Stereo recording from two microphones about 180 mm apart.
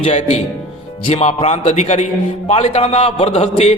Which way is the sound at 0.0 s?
40° left (ahead or behind).